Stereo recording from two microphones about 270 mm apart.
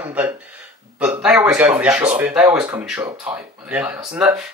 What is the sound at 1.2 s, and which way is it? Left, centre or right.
Speech, centre.